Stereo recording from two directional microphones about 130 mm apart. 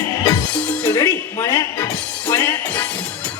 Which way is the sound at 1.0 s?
30° left (ahead or behind).